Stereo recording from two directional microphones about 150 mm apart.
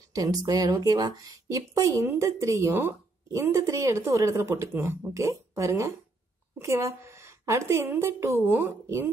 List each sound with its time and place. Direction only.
0.1 s a woman's voice: 25° right (ahead or behind)